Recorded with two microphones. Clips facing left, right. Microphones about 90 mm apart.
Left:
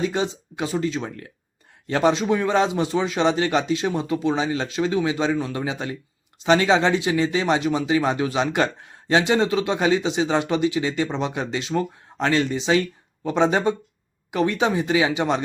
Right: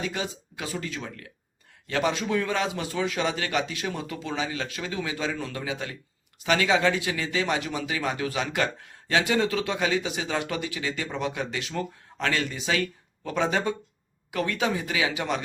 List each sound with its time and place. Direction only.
0.0 s speech: 30° left (ahead or behind)